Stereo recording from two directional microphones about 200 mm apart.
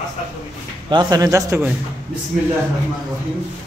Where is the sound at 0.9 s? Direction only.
20° right (ahead or behind).